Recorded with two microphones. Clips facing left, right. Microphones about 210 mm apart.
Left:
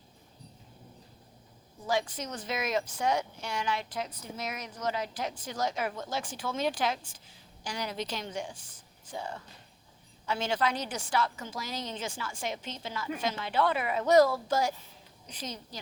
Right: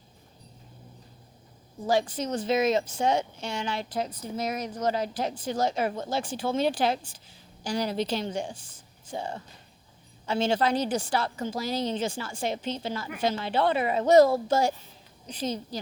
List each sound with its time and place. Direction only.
1.9 s speech: 30° right (ahead or behind)